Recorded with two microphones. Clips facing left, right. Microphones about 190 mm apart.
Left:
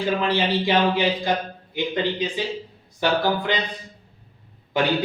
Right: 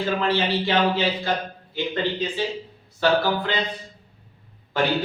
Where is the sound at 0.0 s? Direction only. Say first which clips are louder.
Left 1 dB; 15° left (ahead or behind).